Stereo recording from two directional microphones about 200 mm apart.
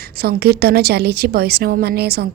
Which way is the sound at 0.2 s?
50° right (ahead or behind).